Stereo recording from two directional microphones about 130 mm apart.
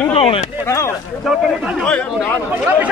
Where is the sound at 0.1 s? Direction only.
45° left (ahead or behind).